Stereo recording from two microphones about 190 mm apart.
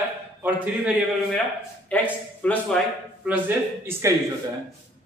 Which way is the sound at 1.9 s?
5° left (ahead or behind).